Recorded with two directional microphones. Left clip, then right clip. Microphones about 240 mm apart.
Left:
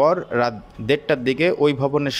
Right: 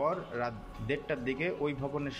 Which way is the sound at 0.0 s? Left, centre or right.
Left.